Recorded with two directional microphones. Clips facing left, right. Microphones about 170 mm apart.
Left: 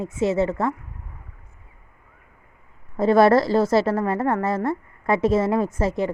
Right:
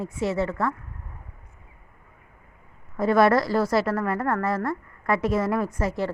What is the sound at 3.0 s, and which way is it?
A woman's voice, 30° left (ahead or behind).